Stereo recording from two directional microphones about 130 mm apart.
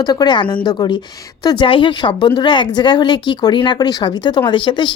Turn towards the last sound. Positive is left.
turn(degrees=35)  # may be behind; listen again after turning